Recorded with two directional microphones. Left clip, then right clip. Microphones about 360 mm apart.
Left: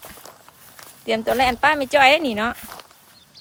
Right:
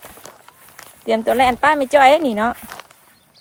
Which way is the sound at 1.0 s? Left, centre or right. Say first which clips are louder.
Right 4 dB; centre.